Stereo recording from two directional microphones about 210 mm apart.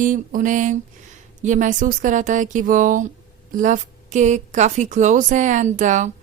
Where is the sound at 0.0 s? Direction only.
40° right (ahead or behind).